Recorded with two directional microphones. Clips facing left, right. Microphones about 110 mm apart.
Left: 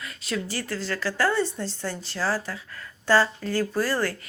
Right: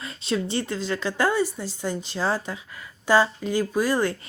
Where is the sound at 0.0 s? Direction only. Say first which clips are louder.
Right 4 dB; 25° right (ahead or behind).